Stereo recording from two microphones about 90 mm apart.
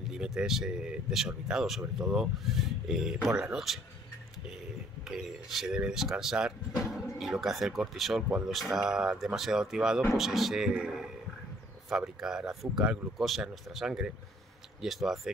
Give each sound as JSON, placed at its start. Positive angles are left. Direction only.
{"t": 0.1, "sound": "speech", "side_deg": -10}
{"t": 5.0, "sound": "speech", "side_deg": -5}
{"t": 12.2, "sound": "speech", "side_deg": -5}